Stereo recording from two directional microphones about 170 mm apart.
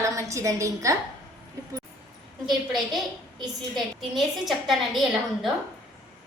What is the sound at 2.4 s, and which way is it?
A woman's voice, centre (ahead or behind).